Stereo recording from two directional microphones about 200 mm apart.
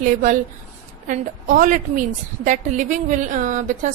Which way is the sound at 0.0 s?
40° right (ahead or behind).